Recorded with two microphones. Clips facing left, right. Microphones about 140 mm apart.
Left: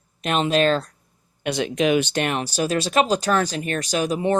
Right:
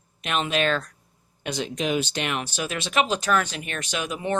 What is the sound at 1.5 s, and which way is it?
Speech, 65° left (ahead or behind).